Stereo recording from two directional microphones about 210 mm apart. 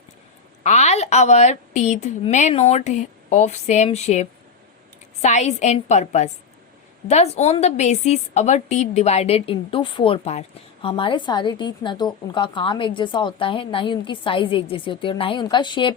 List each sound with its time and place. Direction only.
0.6 s a woman's voice: 30° left (ahead or behind)